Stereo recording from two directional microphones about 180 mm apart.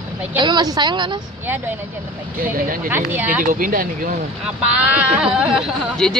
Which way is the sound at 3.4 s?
50° right (ahead or behind).